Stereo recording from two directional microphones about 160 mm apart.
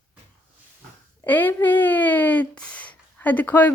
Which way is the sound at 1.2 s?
10° left (ahead or behind).